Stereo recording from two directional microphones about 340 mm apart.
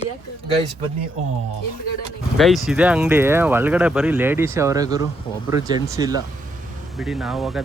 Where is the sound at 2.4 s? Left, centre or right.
Centre.